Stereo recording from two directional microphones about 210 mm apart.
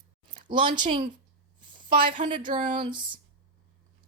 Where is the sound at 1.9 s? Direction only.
40° right (ahead or behind).